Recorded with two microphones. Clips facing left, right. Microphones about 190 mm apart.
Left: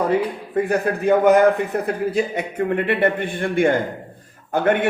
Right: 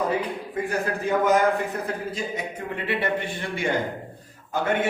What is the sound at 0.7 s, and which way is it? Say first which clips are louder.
A man's voice: left 7 dB; 60° left (ahead or behind).